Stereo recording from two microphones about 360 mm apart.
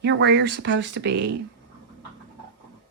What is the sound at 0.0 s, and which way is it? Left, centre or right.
A woman's voice, right.